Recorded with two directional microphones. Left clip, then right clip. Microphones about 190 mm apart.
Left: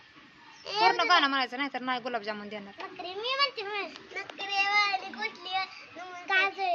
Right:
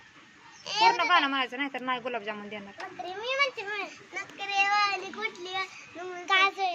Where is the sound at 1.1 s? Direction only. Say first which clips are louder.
Even; 15° left (ahead or behind).